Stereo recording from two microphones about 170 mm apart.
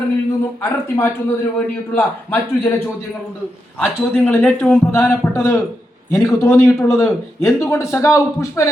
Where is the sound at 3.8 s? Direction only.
10° left (ahead or behind).